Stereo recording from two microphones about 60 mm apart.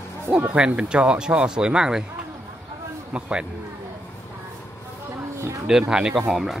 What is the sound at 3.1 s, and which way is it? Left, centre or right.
Speech, centre.